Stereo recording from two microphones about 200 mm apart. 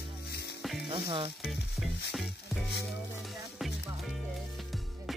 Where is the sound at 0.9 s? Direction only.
25° right (ahead or behind).